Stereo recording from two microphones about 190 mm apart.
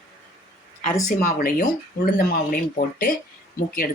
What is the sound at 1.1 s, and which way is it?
Speech, 45° left (ahead or behind).